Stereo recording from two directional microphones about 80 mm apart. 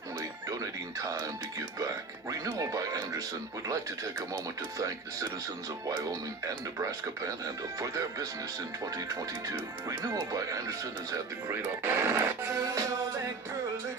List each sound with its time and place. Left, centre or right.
0.2 s music: right
1.8 s speech: right
11.6 s speech: right